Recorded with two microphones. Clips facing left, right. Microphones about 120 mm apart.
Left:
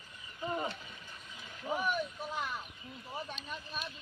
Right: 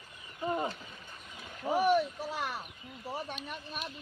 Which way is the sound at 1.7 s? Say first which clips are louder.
Right 7 dB; 85° right.